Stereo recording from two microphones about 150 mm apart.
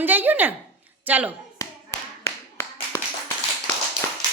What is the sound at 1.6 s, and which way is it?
Tap, 20° left (ahead or behind).